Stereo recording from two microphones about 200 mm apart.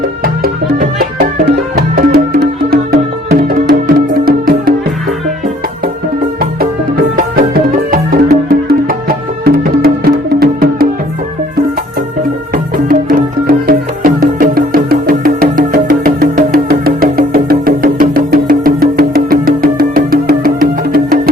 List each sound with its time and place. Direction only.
0.2 s music: 45° right (ahead or behind)
6.4 s music: 45° right (ahead or behind)
12.9 s music: 45° right (ahead or behind)